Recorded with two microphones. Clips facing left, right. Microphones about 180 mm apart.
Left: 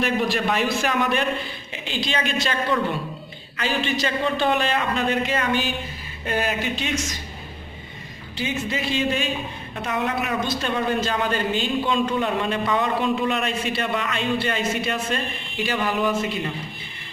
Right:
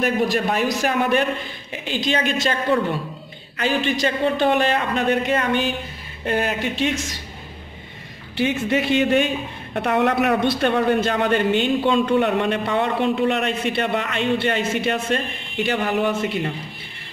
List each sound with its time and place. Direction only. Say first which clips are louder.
0.0 s speech: right 2 dB; 45° right (ahead or behind)
3.5 s speech: right 3 dB; 50° right (ahead or behind)
8.4 s speech: right 6 dB; 60° right (ahead or behind)